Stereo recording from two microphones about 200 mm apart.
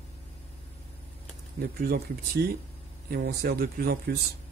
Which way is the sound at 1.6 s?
50° right (ahead or behind).